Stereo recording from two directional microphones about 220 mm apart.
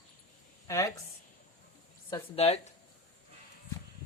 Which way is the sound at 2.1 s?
25° left (ahead or behind).